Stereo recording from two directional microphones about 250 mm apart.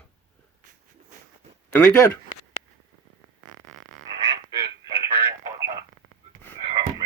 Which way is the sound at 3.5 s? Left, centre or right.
Right.